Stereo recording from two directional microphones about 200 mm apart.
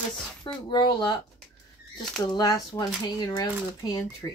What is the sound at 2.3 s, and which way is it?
Speech, 20° left (ahead or behind).